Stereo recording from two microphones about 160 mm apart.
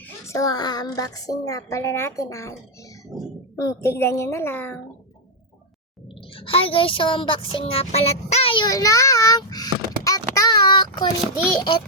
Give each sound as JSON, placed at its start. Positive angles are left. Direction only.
{"t": 0.3, "sound": "speech", "side_deg": 20}
{"t": 3.6, "sound": "a child's voice", "side_deg": 20}
{"t": 6.3, "sound": "speech", "side_deg": 35}
{"t": 10.0, "sound": "child singing", "side_deg": 20}
{"t": 11.5, "sound": "a child's voice", "side_deg": 30}